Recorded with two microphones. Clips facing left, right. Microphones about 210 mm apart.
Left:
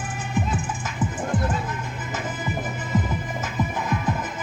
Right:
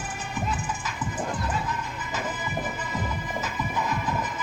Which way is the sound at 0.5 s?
50° left (ahead or behind).